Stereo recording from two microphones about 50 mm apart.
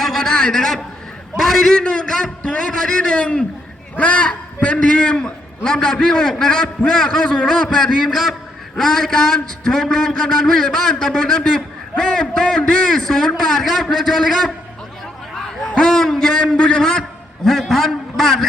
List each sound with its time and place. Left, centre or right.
0.0 s a sound: centre
1.4 s a man's voice: centre
1.8 s a man's voice: left
3.9 s a man's voice: left; by 14.5 s centre
15.9 s a man's voice: centre
17.0 s a sound: centre
17.7 s a man's voice: centre